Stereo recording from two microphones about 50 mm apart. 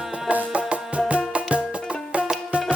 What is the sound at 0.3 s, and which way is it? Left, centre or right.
Music, right.